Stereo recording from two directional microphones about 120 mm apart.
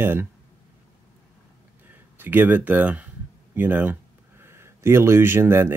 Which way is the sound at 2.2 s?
15° right (ahead or behind).